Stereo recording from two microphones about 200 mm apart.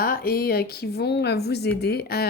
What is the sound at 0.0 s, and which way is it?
Speech, 45° left (ahead or behind).